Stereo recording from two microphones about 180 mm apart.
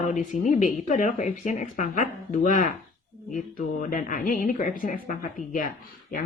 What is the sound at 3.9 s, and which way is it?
A woman's voice, 50° left (ahead or behind).